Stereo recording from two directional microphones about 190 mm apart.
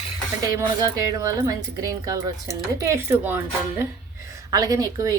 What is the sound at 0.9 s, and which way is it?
Speech, 20° right (ahead or behind).